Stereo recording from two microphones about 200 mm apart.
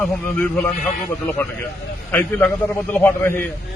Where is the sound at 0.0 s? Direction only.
5° left (ahead or behind).